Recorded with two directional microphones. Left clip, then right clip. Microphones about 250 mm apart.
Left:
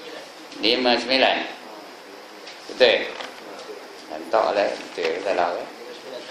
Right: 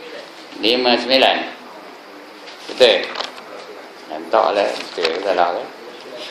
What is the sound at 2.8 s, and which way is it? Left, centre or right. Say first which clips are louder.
Speech: right 4 dB; centre.